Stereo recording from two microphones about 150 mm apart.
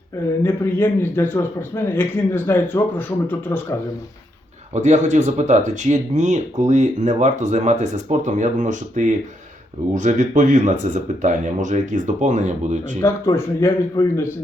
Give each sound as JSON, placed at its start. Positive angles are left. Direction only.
{"t": 0.4, "sound": "a man's voice", "side_deg": 15}
{"t": 4.7, "sound": "speech", "side_deg": -50}
{"t": 13.0, "sound": "speech", "side_deg": 20}